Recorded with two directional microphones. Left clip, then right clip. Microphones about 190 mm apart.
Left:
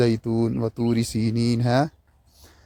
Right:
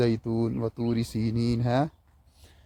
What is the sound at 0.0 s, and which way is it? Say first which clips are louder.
Speech: left 4 dB; 35° left (ahead or behind).